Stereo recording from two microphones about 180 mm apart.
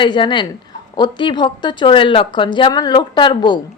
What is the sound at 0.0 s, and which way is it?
Speech, 25° left (ahead or behind).